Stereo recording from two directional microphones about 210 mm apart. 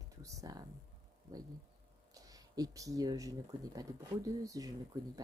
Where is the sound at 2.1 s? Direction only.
15° right (ahead or behind).